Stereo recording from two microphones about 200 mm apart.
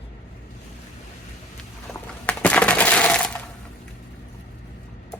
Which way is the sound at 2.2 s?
5° left (ahead or behind).